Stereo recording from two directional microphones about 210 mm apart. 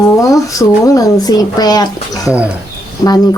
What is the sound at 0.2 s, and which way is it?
Speech, 15° left (ahead or behind).